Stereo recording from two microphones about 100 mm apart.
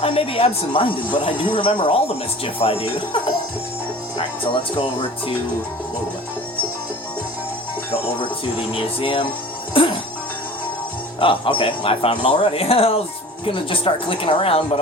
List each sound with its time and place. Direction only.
0.0 s speech: 75° left (ahead or behind)
4.5 s speech: 60° left (ahead or behind)
8.2 s speech: 60° left (ahead or behind)
11.2 s speech: 60° left (ahead or behind); by 13.0 s 80° left
13.4 s speech: 60° left (ahead or behind)